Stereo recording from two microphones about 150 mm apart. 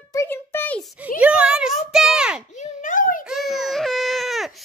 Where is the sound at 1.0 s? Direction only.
10° right (ahead or behind).